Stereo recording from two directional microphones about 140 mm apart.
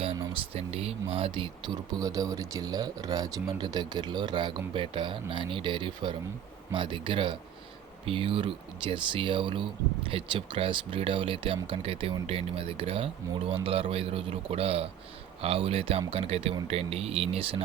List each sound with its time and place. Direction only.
0.5 s speech: 45° right (ahead or behind)